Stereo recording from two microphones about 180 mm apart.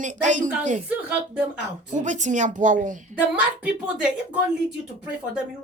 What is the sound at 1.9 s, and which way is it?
Speech, 45° right (ahead or behind).